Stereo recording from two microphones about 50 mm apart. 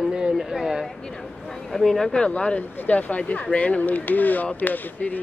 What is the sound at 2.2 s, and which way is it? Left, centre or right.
Speech, left.